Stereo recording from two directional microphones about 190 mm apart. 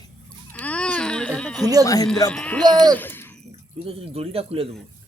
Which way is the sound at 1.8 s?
20° left (ahead or behind).